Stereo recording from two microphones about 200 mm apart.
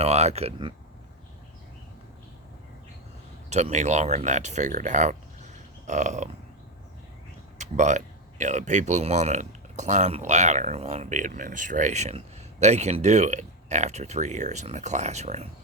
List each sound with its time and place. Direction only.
0.0 s speech: 30° right (ahead or behind)
3.5 s speech: 35° right (ahead or behind)
5.8 s burping: 35° right (ahead or behind)
7.6 s speech: 35° right (ahead or behind)